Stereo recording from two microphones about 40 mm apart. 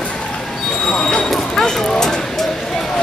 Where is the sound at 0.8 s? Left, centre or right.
Centre.